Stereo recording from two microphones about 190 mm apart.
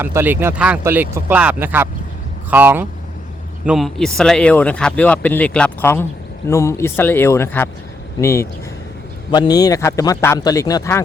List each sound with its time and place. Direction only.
0.0 s speech: 10° right (ahead or behind); by 11.0 s 15° left (ahead or behind)